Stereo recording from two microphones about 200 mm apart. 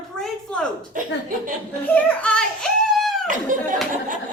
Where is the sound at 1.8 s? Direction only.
5° left (ahead or behind).